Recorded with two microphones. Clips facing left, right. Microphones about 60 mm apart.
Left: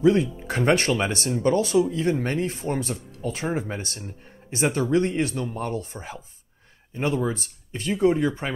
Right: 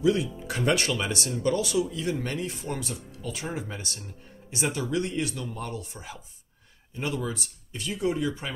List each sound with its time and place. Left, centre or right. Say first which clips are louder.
0.0 s speech: left 5 dB; left